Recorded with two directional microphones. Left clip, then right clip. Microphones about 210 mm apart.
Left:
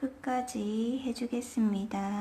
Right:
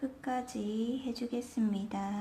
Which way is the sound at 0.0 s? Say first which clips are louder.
Left 3 dB; 5° left (ahead or behind).